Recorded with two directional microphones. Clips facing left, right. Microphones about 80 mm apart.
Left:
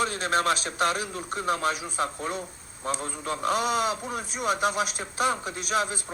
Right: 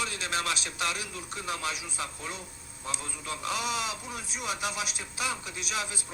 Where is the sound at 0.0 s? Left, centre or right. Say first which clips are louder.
Left 7 dB; left.